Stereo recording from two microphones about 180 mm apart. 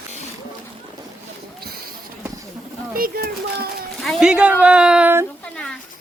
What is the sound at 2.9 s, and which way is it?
Speech, 55° right (ahead or behind).